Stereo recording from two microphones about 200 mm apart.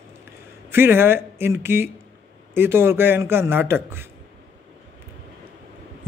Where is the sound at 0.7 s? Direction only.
10° right (ahead or behind).